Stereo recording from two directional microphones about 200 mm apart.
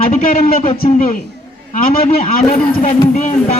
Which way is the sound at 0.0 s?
40° left (ahead or behind).